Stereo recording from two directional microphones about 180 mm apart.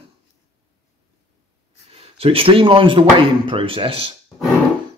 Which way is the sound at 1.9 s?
30° right (ahead or behind).